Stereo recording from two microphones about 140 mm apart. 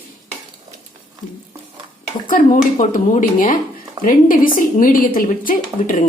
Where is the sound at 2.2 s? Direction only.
65° left (ahead or behind).